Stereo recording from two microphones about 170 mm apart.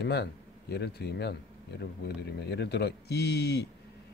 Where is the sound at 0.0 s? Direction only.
75° left (ahead or behind).